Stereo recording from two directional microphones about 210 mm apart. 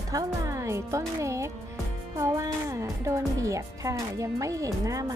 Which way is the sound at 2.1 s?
15° right (ahead or behind).